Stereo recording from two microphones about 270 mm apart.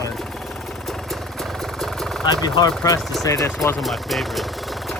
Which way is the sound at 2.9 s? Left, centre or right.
Centre.